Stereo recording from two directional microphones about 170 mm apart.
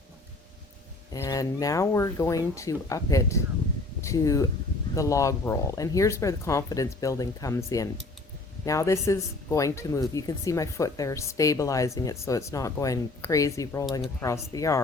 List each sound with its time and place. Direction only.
1.1 s speech: 20° left (ahead or behind)